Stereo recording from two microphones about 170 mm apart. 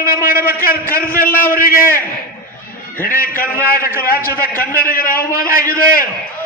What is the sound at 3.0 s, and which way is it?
A man's voice, 55° left (ahead or behind).